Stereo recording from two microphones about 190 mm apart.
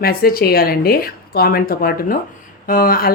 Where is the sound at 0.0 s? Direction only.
50° left (ahead or behind).